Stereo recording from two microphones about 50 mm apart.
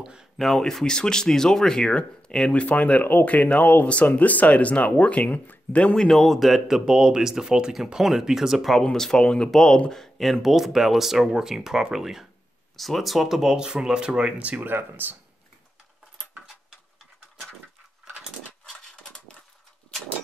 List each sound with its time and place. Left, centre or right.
0.0 s speech: centre
0.4 s speech: centre; by 5.9 s left
5.9 s speech: centre
6.9 s speech: centre
8.9 s speech: centre
12.7 s speech: centre
14.5 s speech: right
19.0 s a sound: centre